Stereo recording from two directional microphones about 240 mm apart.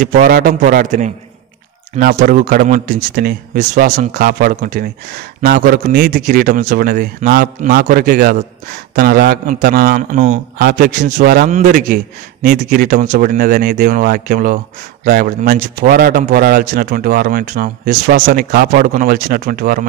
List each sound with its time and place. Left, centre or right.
0.0 s a man's voice: right